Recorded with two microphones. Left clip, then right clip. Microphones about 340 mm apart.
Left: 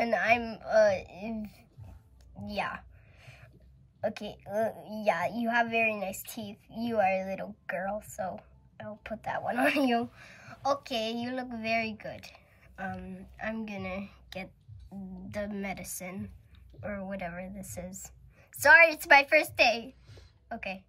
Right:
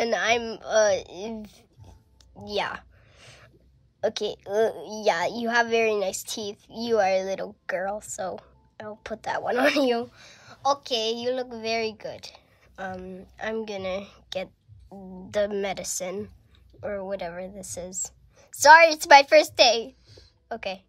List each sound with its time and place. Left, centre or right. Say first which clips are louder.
0.0 s a woman's voice: right 3 dB; centre
2.3 s a sound: right 6 dB; right
4.0 s a woman's voice: right 8 dB; right